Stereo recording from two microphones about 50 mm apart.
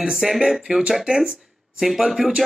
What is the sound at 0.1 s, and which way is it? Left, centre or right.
Speech, centre.